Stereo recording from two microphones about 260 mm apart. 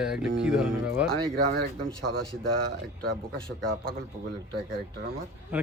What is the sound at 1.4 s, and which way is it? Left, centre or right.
Speech, right.